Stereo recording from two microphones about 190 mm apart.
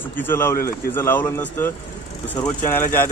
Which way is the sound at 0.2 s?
10° left (ahead or behind).